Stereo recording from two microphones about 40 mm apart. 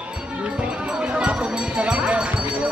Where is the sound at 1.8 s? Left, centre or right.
Right.